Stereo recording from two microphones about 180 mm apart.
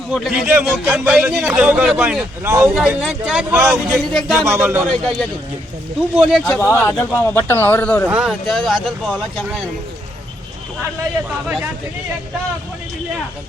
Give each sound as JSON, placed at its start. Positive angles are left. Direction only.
{"t": 0.1, "sound": "a man's voice", "side_deg": 0}
{"t": 2.7, "sound": "a man's voice", "side_deg": 0}
{"t": 3.6, "sound": "a man's voice", "side_deg": -15}
{"t": 4.1, "sound": "a man's voice", "side_deg": 0}
{"t": 4.4, "sound": "a man's voice", "side_deg": -10}
{"t": 4.9, "sound": "a man's voice", "side_deg": 0}
{"t": 6.5, "sound": "speech", "side_deg": 10}
{"t": 8.0, "sound": "a man's voice", "side_deg": -5}
{"t": 11.4, "sound": "a man's voice", "side_deg": -10}